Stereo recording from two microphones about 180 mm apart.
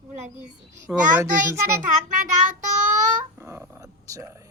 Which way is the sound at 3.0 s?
15° right (ahead or behind).